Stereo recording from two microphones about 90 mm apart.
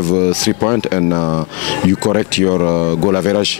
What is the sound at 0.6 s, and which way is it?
Speech, 25° left (ahead or behind).